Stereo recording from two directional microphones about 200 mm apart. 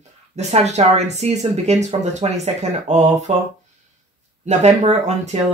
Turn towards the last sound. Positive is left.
turn(degrees=-35)  # may be behind; listen again after turning